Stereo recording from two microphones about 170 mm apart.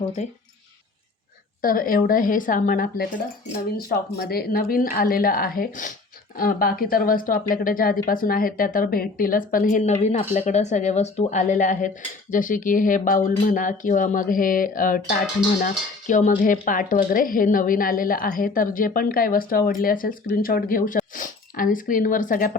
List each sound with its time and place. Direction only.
0.2 s speech: 40° left (ahead or behind)
1.6 s speech: 55° left (ahead or behind)
4.2 s speech: 65° left (ahead or behind)